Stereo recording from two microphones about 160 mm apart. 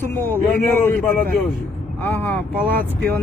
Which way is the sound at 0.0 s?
15° left (ahead or behind).